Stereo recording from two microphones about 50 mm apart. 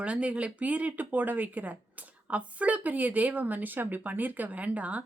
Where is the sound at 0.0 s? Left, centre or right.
Right.